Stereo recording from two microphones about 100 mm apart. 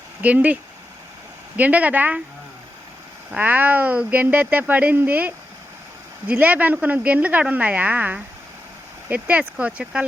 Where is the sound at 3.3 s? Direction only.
15° right (ahead or behind).